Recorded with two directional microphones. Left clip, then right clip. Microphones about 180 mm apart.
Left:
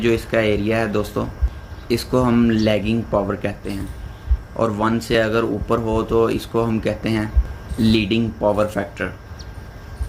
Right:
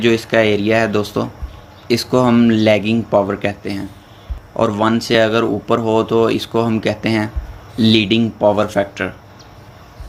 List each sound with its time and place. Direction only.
0.0 s speech: 40° right (ahead or behind)